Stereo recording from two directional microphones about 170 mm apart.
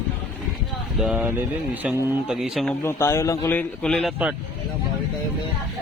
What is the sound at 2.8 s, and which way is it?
Speech, 15° left (ahead or behind).